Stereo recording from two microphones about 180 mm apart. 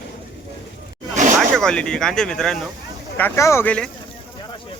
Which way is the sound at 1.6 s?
5° left (ahead or behind).